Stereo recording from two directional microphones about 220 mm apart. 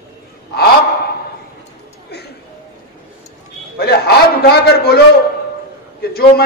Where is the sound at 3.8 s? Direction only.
45° left (ahead or behind).